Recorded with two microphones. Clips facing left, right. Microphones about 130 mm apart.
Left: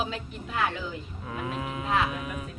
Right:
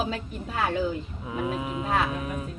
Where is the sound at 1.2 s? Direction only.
10° right (ahead or behind).